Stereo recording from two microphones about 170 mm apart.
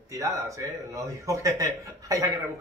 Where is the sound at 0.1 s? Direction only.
20° right (ahead or behind).